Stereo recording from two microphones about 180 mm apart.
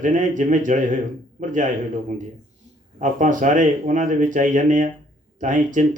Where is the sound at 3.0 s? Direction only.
45° right (ahead or behind).